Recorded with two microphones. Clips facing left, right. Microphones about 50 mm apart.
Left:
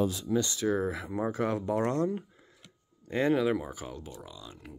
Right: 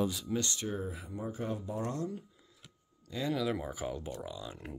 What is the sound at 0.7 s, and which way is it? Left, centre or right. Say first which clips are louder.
Speech: left 8 dB; left.